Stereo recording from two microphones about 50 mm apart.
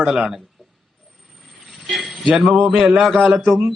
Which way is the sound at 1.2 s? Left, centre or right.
Centre.